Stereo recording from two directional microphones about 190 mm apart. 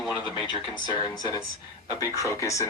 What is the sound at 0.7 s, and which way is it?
A woman's voice, 20° left (ahead or behind).